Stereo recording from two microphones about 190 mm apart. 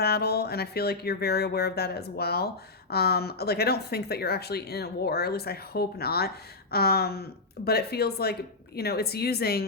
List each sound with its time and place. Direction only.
0.0 s speech: 55° left (ahead or behind)